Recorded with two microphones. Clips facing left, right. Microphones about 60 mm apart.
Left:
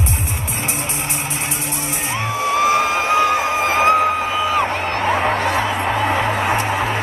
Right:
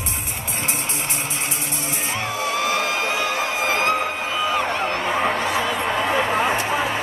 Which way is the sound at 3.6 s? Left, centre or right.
Centre.